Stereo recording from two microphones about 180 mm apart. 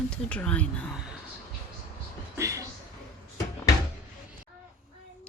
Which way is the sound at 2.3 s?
15° right (ahead or behind).